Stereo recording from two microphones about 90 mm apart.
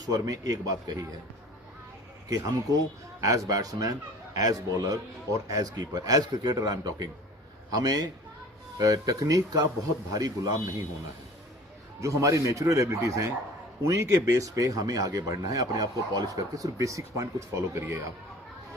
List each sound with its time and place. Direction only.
0.0 s speech: 40° right (ahead or behind)
2.3 s a man's voice: 40° right (ahead or behind)
11.9 s speech: 35° right (ahead or behind)